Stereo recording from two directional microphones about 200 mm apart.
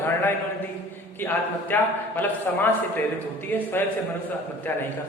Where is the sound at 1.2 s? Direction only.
10° left (ahead or behind).